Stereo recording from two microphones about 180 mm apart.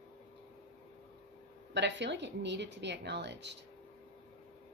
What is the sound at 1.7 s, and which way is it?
A woman's voice, 75° right (ahead or behind).